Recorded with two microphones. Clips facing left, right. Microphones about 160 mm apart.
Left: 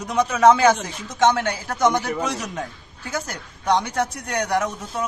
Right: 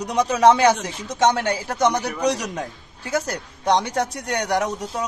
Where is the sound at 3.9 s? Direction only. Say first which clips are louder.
Even; 35° right (ahead or behind).